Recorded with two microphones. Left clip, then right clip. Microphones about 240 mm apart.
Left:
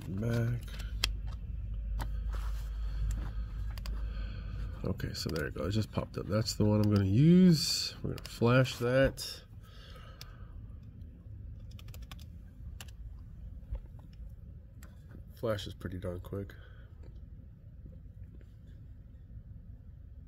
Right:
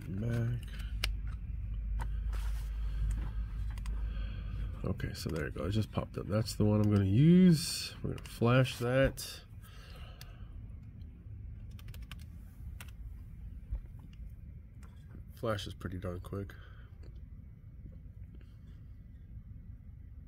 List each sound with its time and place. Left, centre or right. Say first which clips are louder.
0.2 s a sound: left 4 dB; centre
4.1 s speech: left 1 dB; centre
11.7 s typing: even; centre
15.4 s speech: left 1 dB; centre